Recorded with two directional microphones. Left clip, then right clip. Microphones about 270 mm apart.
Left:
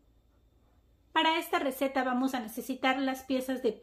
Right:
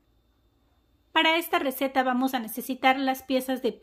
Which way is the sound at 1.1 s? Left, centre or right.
Right.